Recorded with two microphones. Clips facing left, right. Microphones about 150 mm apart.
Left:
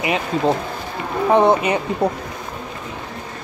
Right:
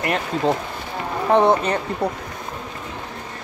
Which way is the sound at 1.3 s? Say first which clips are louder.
Left 1 dB; 10° left (ahead or behind).